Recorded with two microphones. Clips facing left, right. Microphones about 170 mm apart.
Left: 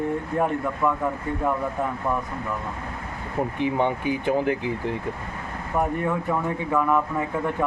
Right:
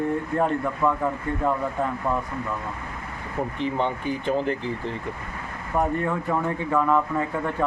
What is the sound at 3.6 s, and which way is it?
Speech, 15° left (ahead or behind).